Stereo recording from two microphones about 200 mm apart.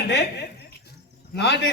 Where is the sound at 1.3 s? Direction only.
60° left (ahead or behind).